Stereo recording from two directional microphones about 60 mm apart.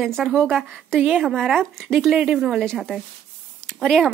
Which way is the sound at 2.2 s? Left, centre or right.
Centre.